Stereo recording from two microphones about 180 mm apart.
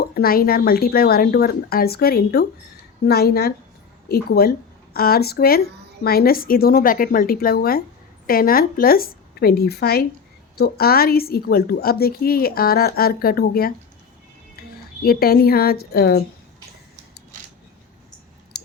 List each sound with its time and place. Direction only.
0.0 s a woman's voice: 55° left (ahead or behind)
15.0 s a woman's voice: 55° left (ahead or behind)